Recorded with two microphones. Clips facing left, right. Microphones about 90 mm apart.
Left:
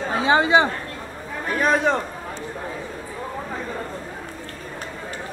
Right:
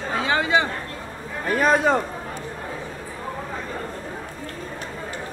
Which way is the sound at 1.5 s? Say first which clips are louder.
Right 1 dB; centre (ahead or behind).